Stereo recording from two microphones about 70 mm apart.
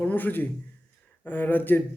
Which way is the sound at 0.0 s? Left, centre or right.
Left.